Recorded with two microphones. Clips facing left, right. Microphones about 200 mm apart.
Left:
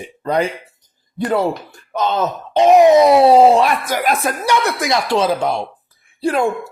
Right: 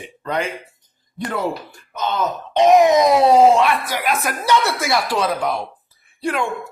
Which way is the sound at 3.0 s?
30° left (ahead or behind).